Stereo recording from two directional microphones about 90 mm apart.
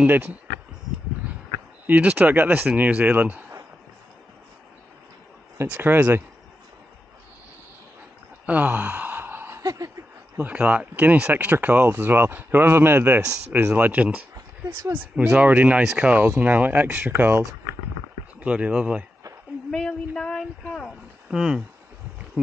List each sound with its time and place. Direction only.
0.0 s speech: 20° right (ahead or behind)
1.9 s speech: 20° right (ahead or behind)
5.6 s speech: 20° right (ahead or behind)
8.5 s gasp: 15° right (ahead or behind)
9.6 s a sound: 40° right (ahead or behind)
10.3 s speech: 15° right (ahead or behind)
18.4 s speech: 15° right (ahead or behind)
19.7 s speech: 10° left (ahead or behind)
21.3 s speech: 5° right (ahead or behind)